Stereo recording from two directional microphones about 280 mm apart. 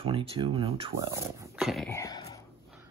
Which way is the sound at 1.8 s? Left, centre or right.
Centre.